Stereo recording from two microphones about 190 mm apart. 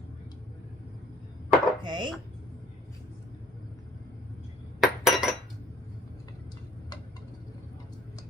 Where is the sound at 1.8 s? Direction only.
25° right (ahead or behind).